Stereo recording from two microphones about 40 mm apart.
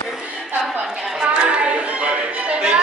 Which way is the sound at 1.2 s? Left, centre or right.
Right.